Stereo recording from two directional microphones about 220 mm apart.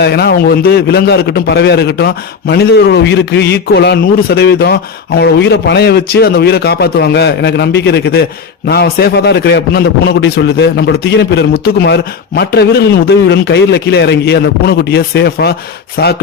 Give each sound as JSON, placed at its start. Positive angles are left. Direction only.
{"t": 0.0, "sound": "a man's voice", "side_deg": 50}